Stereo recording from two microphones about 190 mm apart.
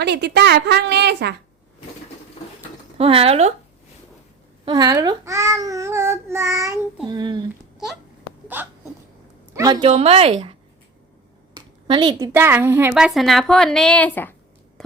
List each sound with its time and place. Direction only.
0.0 s a woman's voice: 65° right (ahead or behind)
3.0 s speech: 30° right (ahead or behind)
4.6 s a child's voice: 20° right (ahead or behind)
8.5 s a child's voice: 10° right (ahead or behind)
9.9 s speech: 35° right (ahead or behind)
11.5 s a sound: 25° right (ahead or behind)
12.3 s a woman's voice: 10° right (ahead or behind); by 14.3 s 10° left (ahead or behind)